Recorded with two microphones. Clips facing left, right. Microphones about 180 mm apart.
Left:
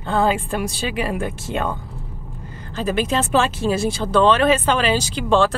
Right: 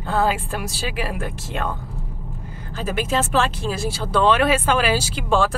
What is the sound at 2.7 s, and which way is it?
Speech, 5° right (ahead or behind).